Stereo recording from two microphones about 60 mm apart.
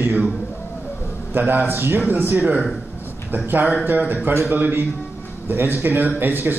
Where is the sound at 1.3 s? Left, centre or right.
Right.